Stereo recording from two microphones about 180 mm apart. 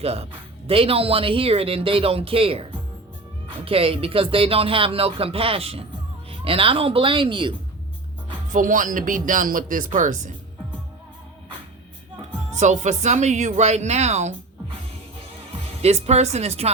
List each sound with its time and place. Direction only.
0.0 s speech: 35° right (ahead or behind)
8.5 s speech: 45° right (ahead or behind)
12.5 s speech: 40° right (ahead or behind)
15.8 s speech: 35° right (ahead or behind)